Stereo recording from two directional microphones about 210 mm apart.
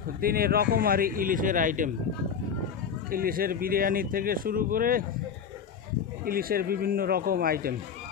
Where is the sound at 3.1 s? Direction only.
45° right (ahead or behind).